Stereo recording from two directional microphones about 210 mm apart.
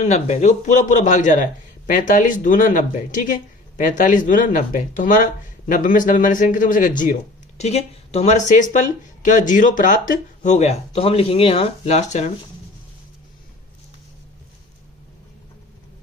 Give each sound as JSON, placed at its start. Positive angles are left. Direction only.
{"t": 0.0, "sound": "speech", "side_deg": 35}